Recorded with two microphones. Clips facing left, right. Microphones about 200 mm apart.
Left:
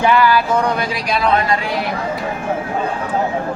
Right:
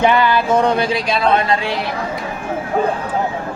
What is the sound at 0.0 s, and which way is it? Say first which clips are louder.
Speech: even; 20° right (ahead or behind).